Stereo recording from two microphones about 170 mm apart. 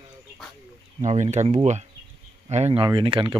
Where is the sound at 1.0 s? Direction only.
45° right (ahead or behind).